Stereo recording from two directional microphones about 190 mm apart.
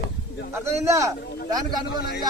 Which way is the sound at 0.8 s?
15° right (ahead or behind).